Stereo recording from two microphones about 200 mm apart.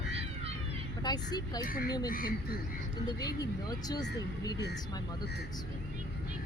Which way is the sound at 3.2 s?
20° left (ahead or behind).